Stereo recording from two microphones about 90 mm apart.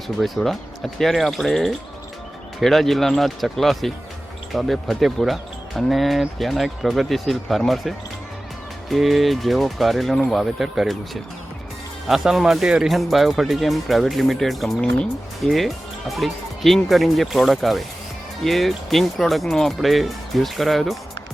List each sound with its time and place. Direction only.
0.2 s speech: centre (ahead or behind)